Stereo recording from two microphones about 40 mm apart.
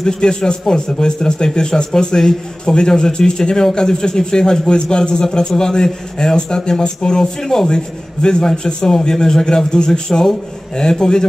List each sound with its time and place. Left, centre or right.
0.0 s a man's voice: centre